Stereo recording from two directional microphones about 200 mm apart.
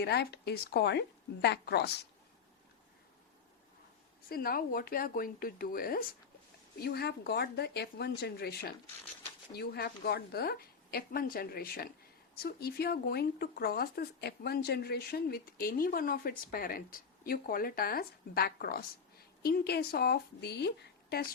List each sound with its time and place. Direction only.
0.0 s speech: 55° left (ahead or behind)
4.3 s speech: 50° left (ahead or behind)